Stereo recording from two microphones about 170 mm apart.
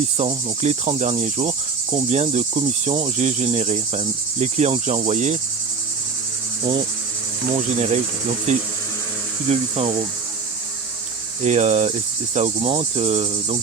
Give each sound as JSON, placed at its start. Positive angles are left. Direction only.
{"t": 0.6, "sound": "cricket", "side_deg": -40}
{"t": 7.5, "sound": "cricket", "side_deg": -35}
{"t": 8.5, "sound": "speech", "side_deg": -40}
{"t": 9.5, "sound": "cricket", "side_deg": -40}
{"t": 11.4, "sound": "cricket", "side_deg": -45}